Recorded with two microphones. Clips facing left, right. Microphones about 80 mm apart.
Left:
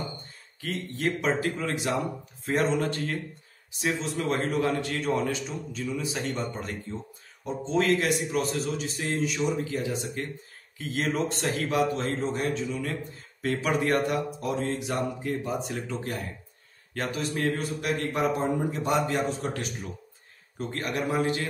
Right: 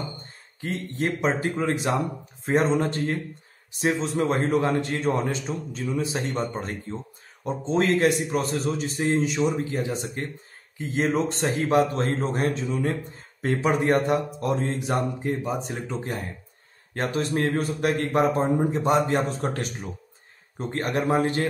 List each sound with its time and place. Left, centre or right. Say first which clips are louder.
0.6 s a man's voice: right 4 dB; right
9.0 s a man's voice: right 5 dB; right
11.9 s a man's voice: right 3 dB; right
13.4 s a man's voice: right 3 dB; right